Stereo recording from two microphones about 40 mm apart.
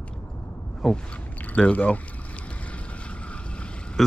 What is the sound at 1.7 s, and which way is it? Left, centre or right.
Speech, left.